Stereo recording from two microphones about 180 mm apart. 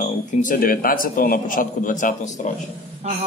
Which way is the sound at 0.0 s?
45° left (ahead or behind).